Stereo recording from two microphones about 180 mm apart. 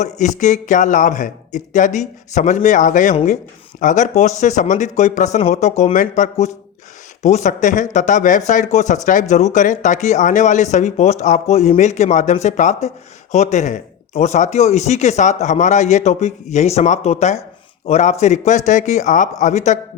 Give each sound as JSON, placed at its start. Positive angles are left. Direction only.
{"t": 0.0, "sound": "a man's voice", "side_deg": 40}